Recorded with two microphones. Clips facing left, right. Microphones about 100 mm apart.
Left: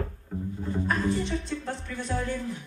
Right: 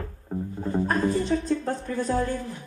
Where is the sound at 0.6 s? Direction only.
40° right (ahead or behind).